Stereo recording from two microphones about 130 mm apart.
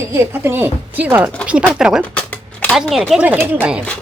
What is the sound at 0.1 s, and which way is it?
A woman's voice, 20° right (ahead or behind).